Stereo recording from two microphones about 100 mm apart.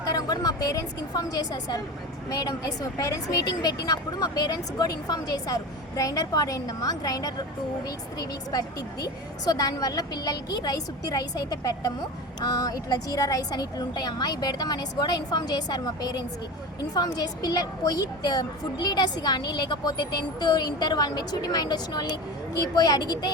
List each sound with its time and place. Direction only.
0.0 s a woman's voice: 40° left (ahead or behind)